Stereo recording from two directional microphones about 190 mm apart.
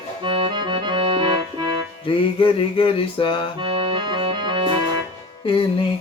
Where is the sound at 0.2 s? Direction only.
25° right (ahead or behind).